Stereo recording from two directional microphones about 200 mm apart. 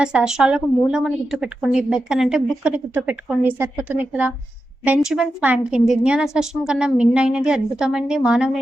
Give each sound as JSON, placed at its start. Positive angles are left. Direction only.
{"t": 0.0, "sound": "a woman's voice", "side_deg": -5}